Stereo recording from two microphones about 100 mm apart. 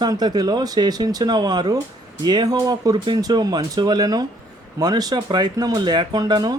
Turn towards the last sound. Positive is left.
turn(degrees=-40)  # may be behind; listen again after turning